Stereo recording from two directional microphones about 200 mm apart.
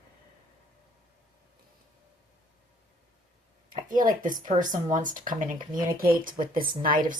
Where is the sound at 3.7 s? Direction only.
40° right (ahead or behind).